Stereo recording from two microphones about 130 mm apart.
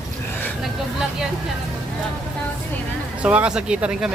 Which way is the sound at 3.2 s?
10° right (ahead or behind).